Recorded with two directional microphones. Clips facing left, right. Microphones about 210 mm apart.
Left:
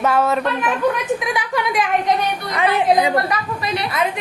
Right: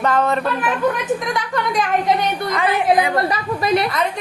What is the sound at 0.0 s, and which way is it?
A woman's voice, 5° left (ahead or behind).